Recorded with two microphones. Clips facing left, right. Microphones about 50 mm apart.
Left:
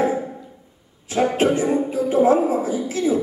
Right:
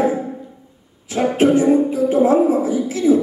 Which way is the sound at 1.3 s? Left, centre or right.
Left.